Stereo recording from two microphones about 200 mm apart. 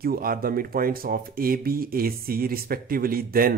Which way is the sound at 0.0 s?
45° right (ahead or behind).